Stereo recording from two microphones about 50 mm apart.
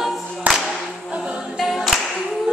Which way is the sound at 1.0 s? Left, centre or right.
Centre.